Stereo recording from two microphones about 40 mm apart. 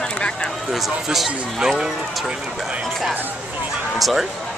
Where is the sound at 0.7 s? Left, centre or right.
Centre.